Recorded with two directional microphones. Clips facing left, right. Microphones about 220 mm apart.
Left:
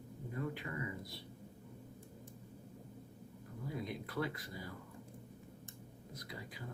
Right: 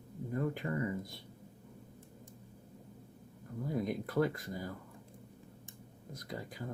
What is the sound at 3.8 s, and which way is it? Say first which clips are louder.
Speech: right 8 dB; 45° right (ahead or behind).